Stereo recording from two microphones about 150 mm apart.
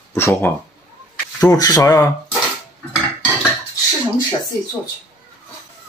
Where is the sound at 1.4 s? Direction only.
25° left (ahead or behind).